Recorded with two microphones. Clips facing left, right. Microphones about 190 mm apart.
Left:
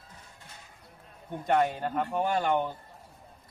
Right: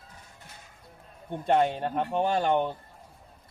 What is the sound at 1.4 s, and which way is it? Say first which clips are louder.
Speech: right 2 dB; 25° right (ahead or behind).